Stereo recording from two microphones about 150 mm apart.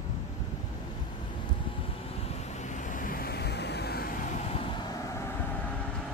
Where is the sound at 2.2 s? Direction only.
50° left (ahead or behind); by 4.3 s 75° left (ahead or behind).